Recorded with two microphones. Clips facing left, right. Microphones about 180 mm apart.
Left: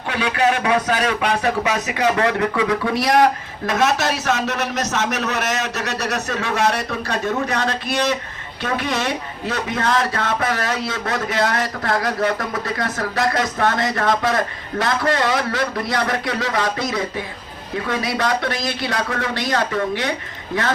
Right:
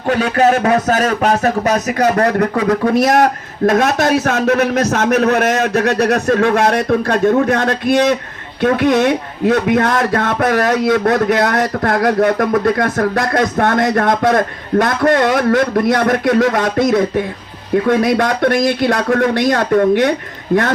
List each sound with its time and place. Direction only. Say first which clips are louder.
0.1 s speech: right 7 dB; 45° right (ahead or behind)